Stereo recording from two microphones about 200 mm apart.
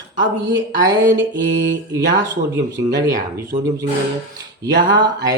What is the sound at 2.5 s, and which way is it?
Mantra, 20° right (ahead or behind).